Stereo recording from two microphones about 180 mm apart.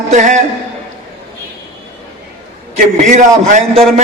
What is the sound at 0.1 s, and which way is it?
Speech, 45° right (ahead or behind).